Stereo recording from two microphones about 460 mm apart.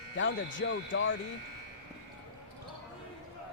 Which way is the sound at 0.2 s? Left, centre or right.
Left.